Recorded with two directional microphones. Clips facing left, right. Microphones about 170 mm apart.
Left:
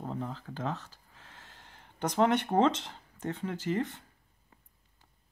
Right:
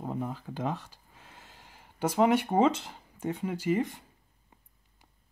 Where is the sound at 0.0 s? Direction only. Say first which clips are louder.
Right 3 dB; 10° right (ahead or behind).